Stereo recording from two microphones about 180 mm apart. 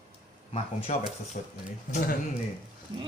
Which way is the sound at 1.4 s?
50° left (ahead or behind).